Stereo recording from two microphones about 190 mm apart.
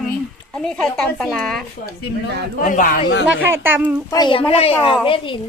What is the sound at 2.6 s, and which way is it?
Speech, 45° left (ahead or behind).